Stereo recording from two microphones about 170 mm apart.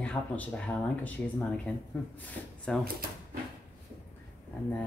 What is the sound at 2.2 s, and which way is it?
Speech, 5° left (ahead or behind).